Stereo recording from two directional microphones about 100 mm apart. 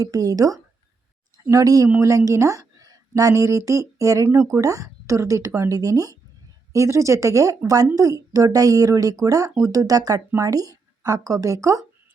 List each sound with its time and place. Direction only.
0.0 s a woman's voice: 35° right (ahead or behind)